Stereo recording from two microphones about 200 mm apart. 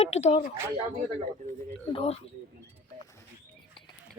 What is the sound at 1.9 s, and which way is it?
Speech, 30° left (ahead or behind).